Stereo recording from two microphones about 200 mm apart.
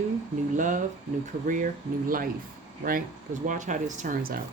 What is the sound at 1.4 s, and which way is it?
Speech, 45° right (ahead or behind).